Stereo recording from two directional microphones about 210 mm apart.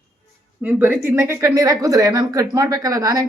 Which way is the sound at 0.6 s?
10° right (ahead or behind).